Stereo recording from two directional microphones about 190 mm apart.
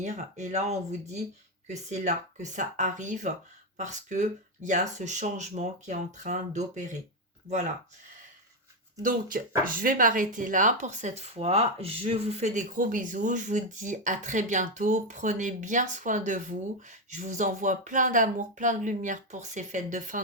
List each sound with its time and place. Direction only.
0.0 s speech: 40° right (ahead or behind)
9.6 s speech: 45° right (ahead or behind)